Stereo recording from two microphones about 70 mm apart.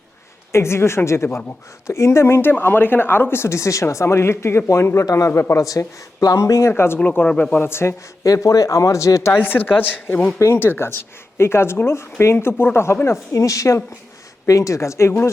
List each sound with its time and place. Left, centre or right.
0.5 s speech: left
5.0 s speech: left
5.3 s speech: left
5.6 s speech: left
7.0 s speech: left
7.6 s speech: left
8.2 s speech: left
9.3 s speech: left